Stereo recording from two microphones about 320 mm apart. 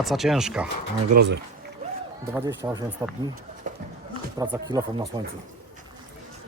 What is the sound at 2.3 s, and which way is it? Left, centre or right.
Speech, centre.